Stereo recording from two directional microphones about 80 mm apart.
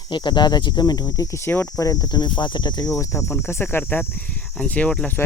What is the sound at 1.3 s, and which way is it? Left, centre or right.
Speech, left.